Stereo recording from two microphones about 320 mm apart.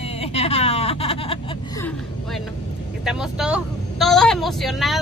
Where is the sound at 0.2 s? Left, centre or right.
Centre.